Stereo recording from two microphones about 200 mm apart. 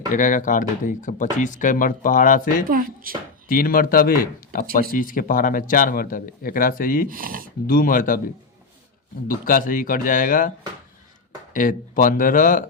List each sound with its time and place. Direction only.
0.1 s speech: 40° left (ahead or behind)
2.6 s speech: 45° right (ahead or behind)
3.5 s speech: 45° left (ahead or behind)
7.1 s speech: 45° right (ahead or behind)
7.7 s speech: 45° left (ahead or behind)
9.2 s speech: 45° left (ahead or behind)
11.5 s speech: 40° left (ahead or behind)